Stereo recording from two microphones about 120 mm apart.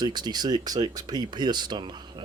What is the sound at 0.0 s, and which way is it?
Speech, 35° right (ahead or behind).